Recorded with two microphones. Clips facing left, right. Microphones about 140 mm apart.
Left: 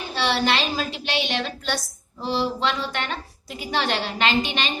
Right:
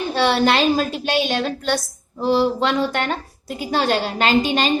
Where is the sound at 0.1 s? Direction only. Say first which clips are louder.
Right 5 dB; 50° right (ahead or behind).